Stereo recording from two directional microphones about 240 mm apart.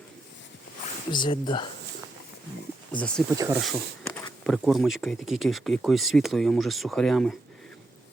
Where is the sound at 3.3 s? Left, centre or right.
Centre.